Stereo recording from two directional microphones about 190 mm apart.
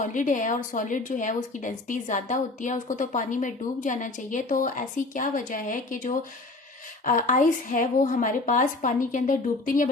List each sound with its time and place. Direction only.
0.0 s a woman's voice: 40° left (ahead or behind)